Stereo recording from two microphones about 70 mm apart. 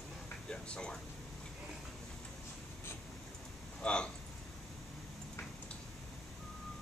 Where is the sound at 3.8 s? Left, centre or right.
Centre.